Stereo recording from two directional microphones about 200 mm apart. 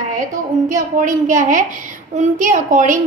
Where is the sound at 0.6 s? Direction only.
40° right (ahead or behind).